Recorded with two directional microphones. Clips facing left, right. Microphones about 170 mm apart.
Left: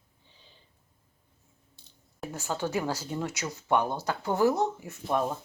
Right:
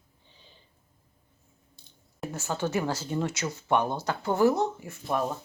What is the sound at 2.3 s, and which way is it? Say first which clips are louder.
Speech: right 1 dB; 15° left (ahead or behind).